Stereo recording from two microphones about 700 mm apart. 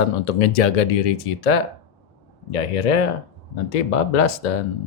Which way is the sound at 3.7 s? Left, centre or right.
Left.